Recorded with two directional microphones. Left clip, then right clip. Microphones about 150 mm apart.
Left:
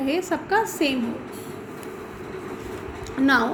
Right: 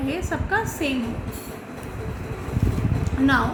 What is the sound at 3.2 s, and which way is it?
Speech, 40° left (ahead or behind).